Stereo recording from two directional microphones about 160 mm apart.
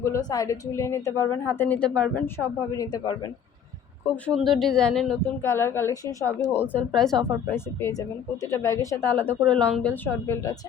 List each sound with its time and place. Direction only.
0.0 s a woman's voice: 20° left (ahead or behind)
4.1 s speech: centre (ahead or behind)
5.4 s a woman's voice: 15° left (ahead or behind)
6.9 s speech: centre (ahead or behind)
7.5 s a woman's voice: 15° left (ahead or behind)